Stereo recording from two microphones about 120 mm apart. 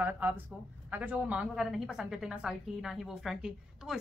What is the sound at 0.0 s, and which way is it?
Speech, 15° right (ahead or behind).